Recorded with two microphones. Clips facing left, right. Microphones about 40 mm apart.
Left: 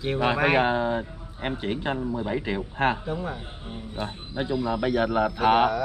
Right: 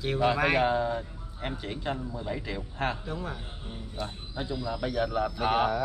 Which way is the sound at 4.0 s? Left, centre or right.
Left.